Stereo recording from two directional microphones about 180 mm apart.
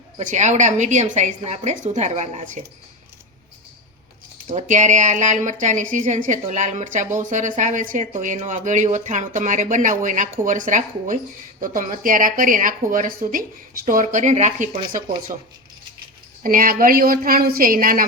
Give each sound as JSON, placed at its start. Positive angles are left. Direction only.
{"t": 0.3, "sound": "a woman's voice", "side_deg": -40}
{"t": 4.4, "sound": "speech", "side_deg": -40}
{"t": 16.4, "sound": "speech", "side_deg": -50}